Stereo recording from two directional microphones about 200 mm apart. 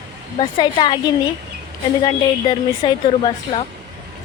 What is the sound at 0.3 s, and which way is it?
Speech, 25° left (ahead or behind).